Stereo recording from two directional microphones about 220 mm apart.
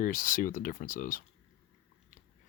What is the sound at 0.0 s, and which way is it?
Speech, 40° left (ahead or behind).